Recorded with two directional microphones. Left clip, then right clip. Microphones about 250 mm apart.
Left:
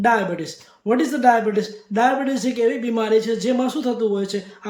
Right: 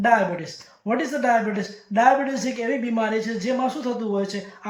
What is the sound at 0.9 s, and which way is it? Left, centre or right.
Speech, centre.